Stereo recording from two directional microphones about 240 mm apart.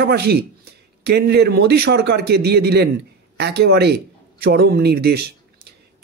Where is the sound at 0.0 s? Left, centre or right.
Right.